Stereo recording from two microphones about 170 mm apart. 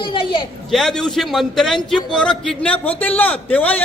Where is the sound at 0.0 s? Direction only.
30° left (ahead or behind).